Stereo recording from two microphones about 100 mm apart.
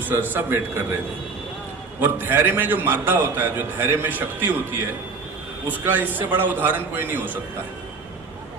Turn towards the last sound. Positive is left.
turn(degrees=-20)  # may be behind; listen again after turning